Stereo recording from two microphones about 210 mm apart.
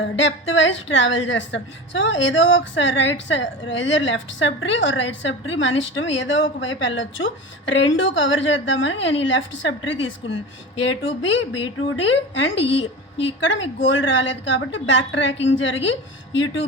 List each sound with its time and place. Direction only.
0.0 s speech: 65° left (ahead or behind)
12.6 s a woman's voice: 25° left (ahead or behind)
13.4 s speech: 60° left (ahead or behind)